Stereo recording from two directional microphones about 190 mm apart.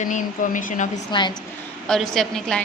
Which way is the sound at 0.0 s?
40° left (ahead or behind).